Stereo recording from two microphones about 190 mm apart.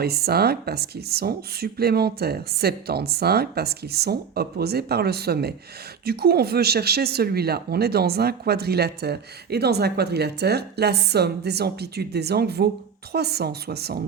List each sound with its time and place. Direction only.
0.0 s speech: 55° right (ahead or behind)